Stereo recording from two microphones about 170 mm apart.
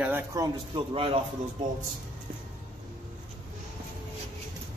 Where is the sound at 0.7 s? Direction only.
30° right (ahead or behind).